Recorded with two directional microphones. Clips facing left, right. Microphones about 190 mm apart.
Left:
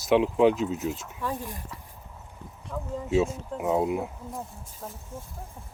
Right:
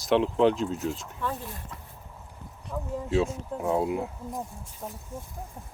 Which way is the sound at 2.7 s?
10° right (ahead or behind).